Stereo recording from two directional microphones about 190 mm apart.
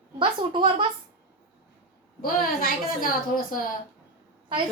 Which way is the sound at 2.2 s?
50° left (ahead or behind).